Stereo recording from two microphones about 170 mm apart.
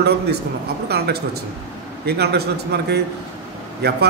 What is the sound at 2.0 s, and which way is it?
A man's voice, 70° right (ahead or behind).